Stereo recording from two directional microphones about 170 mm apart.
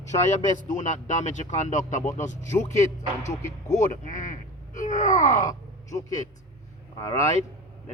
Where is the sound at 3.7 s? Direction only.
50° left (ahead or behind).